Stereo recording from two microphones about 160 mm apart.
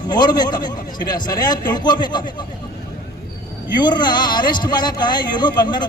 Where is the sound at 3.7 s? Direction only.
25° left (ahead or behind).